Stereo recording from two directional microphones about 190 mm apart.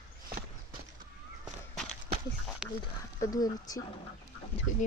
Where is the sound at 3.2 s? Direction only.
20° left (ahead or behind).